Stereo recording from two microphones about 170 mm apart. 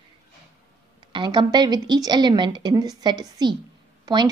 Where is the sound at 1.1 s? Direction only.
30° right (ahead or behind).